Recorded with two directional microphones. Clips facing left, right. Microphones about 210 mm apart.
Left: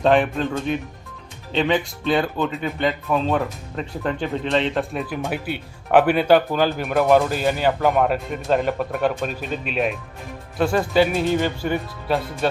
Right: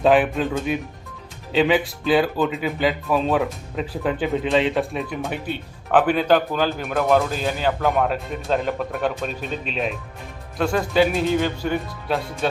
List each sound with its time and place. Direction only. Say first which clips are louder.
0.0 s speech: right 1 dB; 5° right (ahead or behind)